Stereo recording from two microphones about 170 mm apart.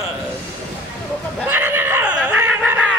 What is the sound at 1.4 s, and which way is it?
Laughter, 10° right (ahead or behind).